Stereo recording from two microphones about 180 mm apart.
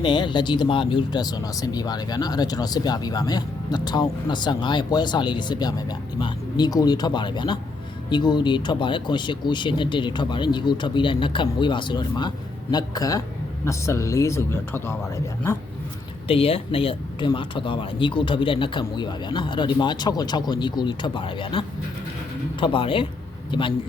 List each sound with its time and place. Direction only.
0.0 s speech: 25° left (ahead or behind)
16.2 s speech: 30° left (ahead or behind)
22.6 s speech: 30° left (ahead or behind)